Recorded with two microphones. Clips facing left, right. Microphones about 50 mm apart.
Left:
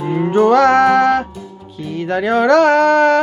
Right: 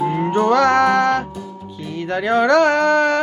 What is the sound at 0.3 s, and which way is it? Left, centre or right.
Music, centre.